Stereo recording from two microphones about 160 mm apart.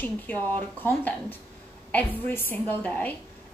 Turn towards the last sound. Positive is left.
turn(degrees=10)  # may be behind; listen again after turning